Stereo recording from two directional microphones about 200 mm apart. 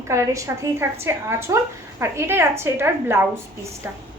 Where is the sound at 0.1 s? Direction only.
15° right (ahead or behind).